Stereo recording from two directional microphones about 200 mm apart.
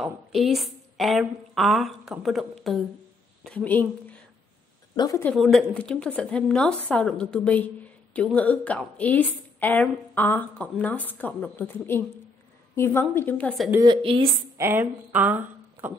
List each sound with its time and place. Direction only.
0.0 s a woman's voice: centre (ahead or behind); by 5.3 s 15° left (ahead or behind)
5.3 s a woman's voice: centre (ahead or behind)
13.7 s a woman's voice: 15° right (ahead or behind)
14.0 s a woman's voice: 25° right (ahead or behind)
14.6 s speech: 10° right (ahead or behind)